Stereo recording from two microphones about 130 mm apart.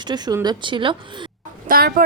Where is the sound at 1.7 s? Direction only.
90° right.